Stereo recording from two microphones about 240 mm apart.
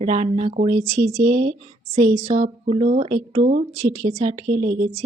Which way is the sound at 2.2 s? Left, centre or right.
Right.